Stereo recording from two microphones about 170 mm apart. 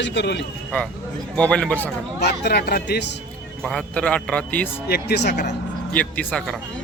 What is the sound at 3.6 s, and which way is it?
Speech, 5° left (ahead or behind).